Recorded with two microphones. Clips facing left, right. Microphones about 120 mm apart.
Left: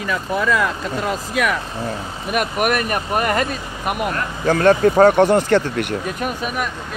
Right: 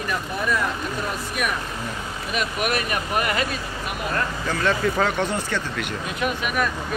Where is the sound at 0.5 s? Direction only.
90° left.